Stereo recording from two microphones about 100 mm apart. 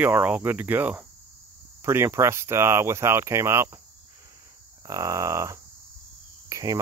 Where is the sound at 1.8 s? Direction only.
25° right (ahead or behind).